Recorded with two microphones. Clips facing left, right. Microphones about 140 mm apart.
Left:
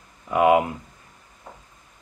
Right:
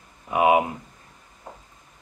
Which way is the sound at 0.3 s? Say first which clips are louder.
Left 1 dB; 20° right (ahead or behind).